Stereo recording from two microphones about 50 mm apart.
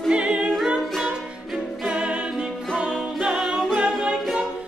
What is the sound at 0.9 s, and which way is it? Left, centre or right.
Music, centre.